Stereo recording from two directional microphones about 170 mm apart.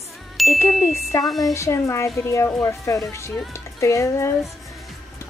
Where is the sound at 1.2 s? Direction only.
Centre (ahead or behind).